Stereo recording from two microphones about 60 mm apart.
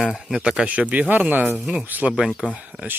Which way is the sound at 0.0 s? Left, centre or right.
Centre.